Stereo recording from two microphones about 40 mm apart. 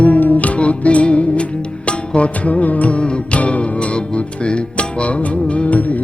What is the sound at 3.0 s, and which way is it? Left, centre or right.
Music, left.